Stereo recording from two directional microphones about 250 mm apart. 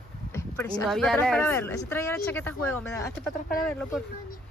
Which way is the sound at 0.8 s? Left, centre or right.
Centre.